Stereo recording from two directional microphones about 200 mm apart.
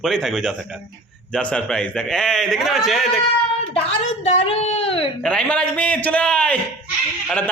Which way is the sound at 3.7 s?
30° left (ahead or behind).